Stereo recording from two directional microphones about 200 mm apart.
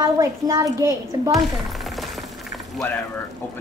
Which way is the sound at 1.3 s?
Centre (ahead or behind).